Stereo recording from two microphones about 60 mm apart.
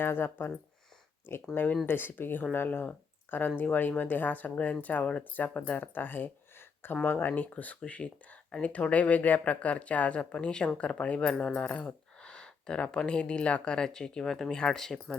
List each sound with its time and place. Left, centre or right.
0.0 s speech: left
1.5 s speech: left; by 15.2 s centre